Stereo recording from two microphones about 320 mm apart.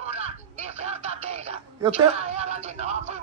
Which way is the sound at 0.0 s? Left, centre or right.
Centre.